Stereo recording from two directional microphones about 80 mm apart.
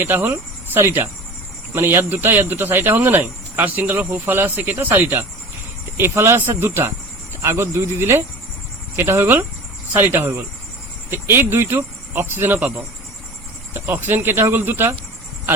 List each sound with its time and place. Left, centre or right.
0.0 s cricket: right
1.7 s speech: right